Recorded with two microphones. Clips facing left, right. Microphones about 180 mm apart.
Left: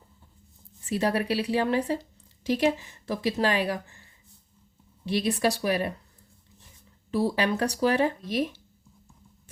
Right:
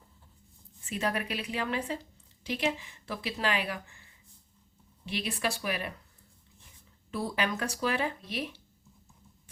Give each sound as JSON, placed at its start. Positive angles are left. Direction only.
{"t": 0.9, "sound": "a woman's voice", "side_deg": 35}
{"t": 7.1, "sound": "speech", "side_deg": 35}